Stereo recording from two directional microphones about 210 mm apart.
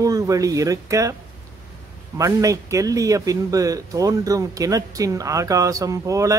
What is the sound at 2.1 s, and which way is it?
Speech, 15° right (ahead or behind).